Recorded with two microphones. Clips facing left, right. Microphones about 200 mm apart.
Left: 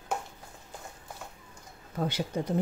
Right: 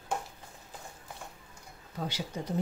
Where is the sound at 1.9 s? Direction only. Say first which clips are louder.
Left 6 dB; 55° left (ahead or behind).